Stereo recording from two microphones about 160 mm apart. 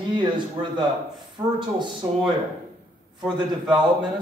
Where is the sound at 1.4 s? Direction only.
15° right (ahead or behind).